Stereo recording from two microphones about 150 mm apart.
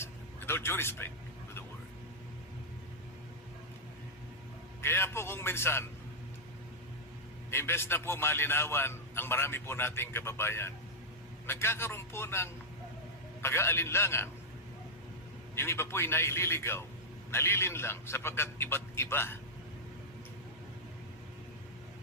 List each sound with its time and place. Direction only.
0.0 s vehicle: 15° left (ahead or behind)
4.8 s a man's voice: 15° left (ahead or behind)
7.5 s a man's voice: 15° left (ahead or behind)
15.5 s a man's voice: 15° left (ahead or behind)